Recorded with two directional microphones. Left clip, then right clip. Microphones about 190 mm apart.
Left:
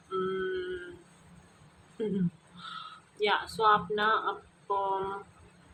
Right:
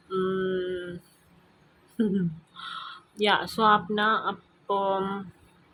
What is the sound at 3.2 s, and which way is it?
Speech, 40° right (ahead or behind).